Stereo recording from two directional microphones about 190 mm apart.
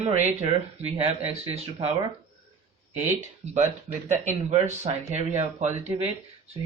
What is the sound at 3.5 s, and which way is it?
Speech, 40° right (ahead or behind).